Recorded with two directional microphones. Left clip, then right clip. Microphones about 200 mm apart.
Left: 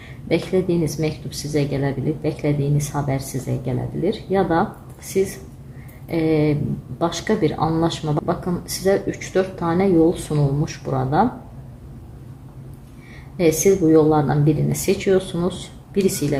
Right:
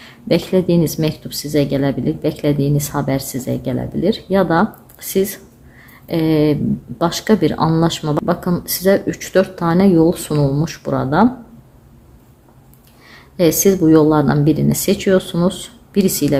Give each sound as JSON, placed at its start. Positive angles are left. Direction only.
{"t": 0.3, "sound": "speech", "side_deg": -40}
{"t": 13.3, "sound": "speech", "side_deg": -40}